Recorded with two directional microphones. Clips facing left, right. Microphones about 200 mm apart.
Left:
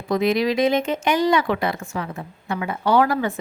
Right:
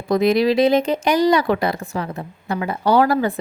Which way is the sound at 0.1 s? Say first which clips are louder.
Right 4 dB; 35° right (ahead or behind).